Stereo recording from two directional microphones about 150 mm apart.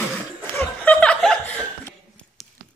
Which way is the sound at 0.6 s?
10° left (ahead or behind).